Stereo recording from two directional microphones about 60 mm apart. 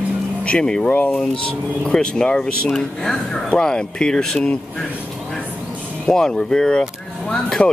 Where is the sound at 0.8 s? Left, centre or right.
Left.